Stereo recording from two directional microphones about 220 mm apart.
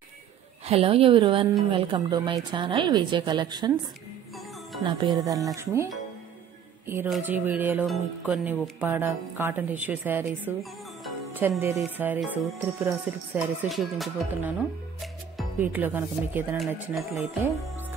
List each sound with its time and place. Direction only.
0.7 s a woman's voice: 25° right (ahead or behind)
4.8 s speech: 20° right (ahead or behind)
7.1 s speech: 10° right (ahead or behind)